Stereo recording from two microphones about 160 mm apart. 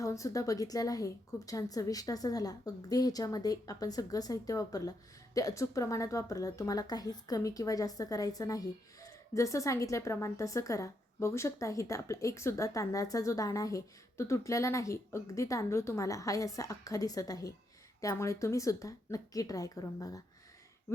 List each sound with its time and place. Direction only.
0.0 s speech: 20° left (ahead or behind)